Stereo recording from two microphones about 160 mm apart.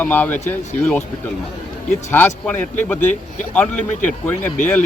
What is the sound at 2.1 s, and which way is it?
Speech, 15° left (ahead or behind).